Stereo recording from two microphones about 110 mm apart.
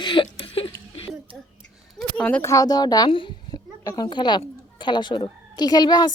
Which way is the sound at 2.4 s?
30° left (ahead or behind).